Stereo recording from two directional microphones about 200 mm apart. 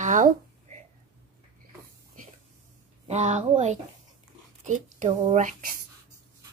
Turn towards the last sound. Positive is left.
turn(degrees=-40)  # may be behind; listen again after turning